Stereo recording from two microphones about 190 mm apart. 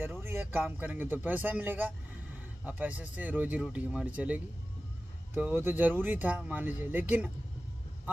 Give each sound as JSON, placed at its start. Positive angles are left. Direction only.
{"t": 0.0, "sound": "a man's voice", "side_deg": -10}